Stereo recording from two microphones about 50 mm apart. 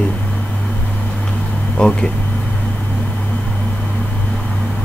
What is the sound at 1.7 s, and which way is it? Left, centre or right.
Speech, centre.